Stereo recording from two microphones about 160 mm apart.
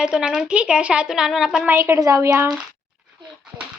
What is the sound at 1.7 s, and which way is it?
Speech, 15° right (ahead or behind).